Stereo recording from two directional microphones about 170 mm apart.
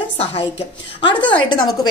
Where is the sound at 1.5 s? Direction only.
25° left (ahead or behind).